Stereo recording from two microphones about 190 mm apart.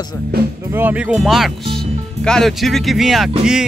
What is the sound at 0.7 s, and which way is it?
Speech, 10° right (ahead or behind).